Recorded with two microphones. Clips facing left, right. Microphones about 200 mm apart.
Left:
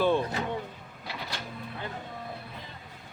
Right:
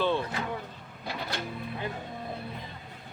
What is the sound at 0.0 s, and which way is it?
Vehicle, 15° left (ahead or behind).